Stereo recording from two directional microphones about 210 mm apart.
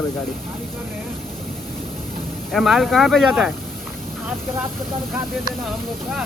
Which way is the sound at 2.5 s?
Centre (ahead or behind).